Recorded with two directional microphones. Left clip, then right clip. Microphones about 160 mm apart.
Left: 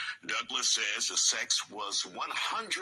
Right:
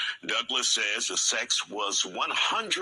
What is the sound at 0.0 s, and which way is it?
Speech, 30° right (ahead or behind).